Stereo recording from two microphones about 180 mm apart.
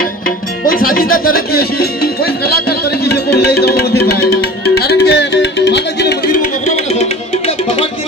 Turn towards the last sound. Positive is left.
turn(degrees=45)  # may be behind; listen again after turning